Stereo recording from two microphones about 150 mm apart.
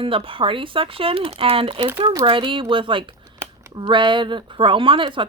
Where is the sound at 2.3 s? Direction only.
35° right (ahead or behind).